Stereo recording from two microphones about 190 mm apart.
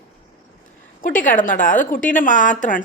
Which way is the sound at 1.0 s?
45° left (ahead or behind).